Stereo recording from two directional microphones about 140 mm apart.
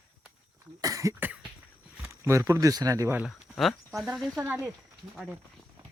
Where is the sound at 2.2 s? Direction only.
20° right (ahead or behind).